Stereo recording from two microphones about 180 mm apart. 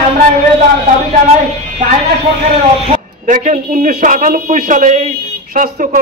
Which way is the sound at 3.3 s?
45° right (ahead or behind).